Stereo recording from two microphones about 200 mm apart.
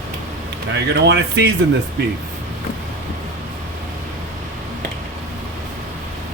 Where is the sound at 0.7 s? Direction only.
60° right (ahead or behind).